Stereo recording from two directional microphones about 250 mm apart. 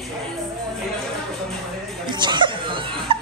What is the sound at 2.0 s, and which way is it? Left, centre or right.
Chuckle, centre.